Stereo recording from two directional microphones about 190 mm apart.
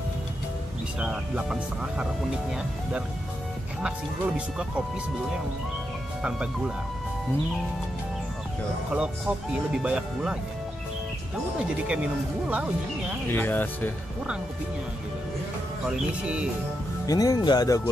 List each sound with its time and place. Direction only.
0.9 s speech: 5° right (ahead or behind)
3.8 s speech: 5° right (ahead or behind)
8.9 s speech: 5° right (ahead or behind)
11.9 s speech: 5° right (ahead or behind)
13.3 s speech: 10° left (ahead or behind)
17.0 s speech: 20° left (ahead or behind)